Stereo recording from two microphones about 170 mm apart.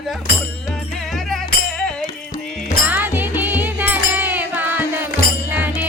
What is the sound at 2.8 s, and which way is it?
Music, 10° right (ahead or behind).